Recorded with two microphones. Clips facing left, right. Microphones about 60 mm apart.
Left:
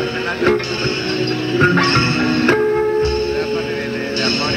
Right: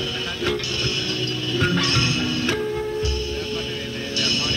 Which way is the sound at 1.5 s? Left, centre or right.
Left.